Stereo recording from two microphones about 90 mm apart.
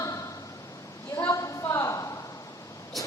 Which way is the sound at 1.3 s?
40° left (ahead or behind).